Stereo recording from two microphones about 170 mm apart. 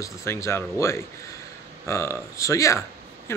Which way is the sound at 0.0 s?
15° left (ahead or behind).